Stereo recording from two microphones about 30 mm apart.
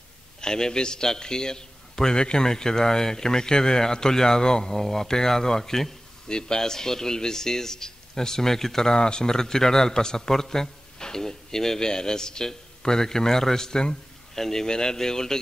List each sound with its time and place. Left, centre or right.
0.4 s a man's voice: left
6.2 s speech: left
8.9 s a man's voice: left